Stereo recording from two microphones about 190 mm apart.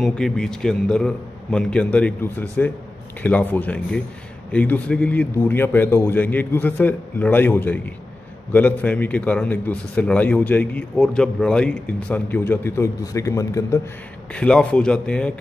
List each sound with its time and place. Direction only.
0.0 s a man's voice: 5° left (ahead or behind)
14.3 s a man's voice: 5° left (ahead or behind)